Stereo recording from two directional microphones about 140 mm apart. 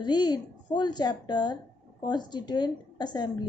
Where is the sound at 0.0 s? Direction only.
30° left (ahead or behind).